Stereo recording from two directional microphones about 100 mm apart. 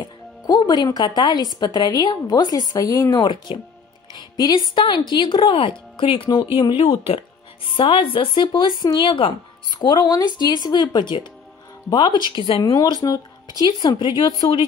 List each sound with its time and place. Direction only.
0.0 s speech: 45° left (ahead or behind)
3.5 s speech: 60° left (ahead or behind)
4.2 s speech: 45° left (ahead or behind)
12.6 s speech: 35° left (ahead or behind); by 14.2 s 50° left (ahead or behind)